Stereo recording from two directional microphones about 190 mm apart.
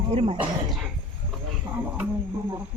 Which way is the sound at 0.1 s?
30° right (ahead or behind).